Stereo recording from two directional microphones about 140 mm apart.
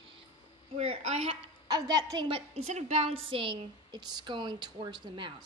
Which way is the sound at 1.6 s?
25° right (ahead or behind).